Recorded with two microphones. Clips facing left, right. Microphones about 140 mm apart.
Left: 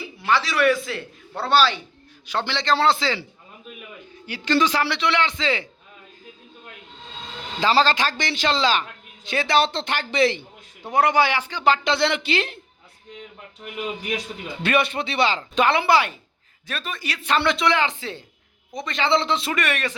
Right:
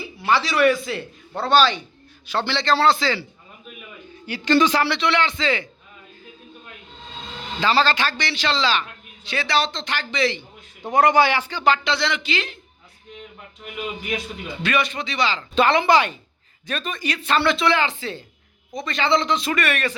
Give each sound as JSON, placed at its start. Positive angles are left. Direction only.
{"t": 0.3, "sound": "speech", "side_deg": 0}
{"t": 4.3, "sound": "speech", "side_deg": 0}
{"t": 7.6, "sound": "a man's voice", "side_deg": 35}
{"t": 10.9, "sound": "speech", "side_deg": 10}
{"t": 11.9, "sound": "a man's voice", "side_deg": 55}
{"t": 14.7, "sound": "a man's voice", "side_deg": 55}
{"t": 15.5, "sound": "speech", "side_deg": 10}
{"t": 17.2, "sound": "a man's voice", "side_deg": 20}